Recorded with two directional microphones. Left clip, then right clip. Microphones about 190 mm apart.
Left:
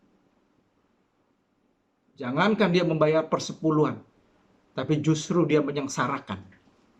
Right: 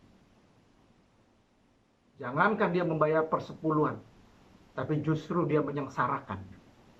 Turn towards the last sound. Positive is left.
turn(degrees=15)  # may be behind; listen again after turning